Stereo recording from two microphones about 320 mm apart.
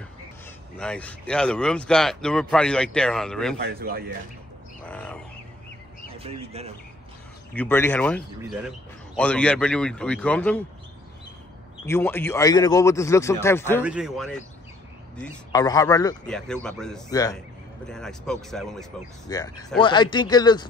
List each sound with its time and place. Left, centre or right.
0.7 s a man's voice: centre
3.5 s speech: right
4.8 s bird: centre
6.0 s speech: centre
7.5 s a man's voice: centre
11.8 s a man's voice: centre
19.3 s a man's voice: centre